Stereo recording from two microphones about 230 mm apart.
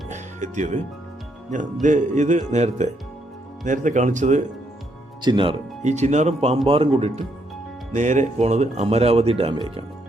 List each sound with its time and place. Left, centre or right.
0.1 s music: right
1.5 s speech: right
5.2 s speech: centre